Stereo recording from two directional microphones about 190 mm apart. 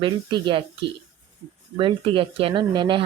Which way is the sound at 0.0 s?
25° right (ahead or behind).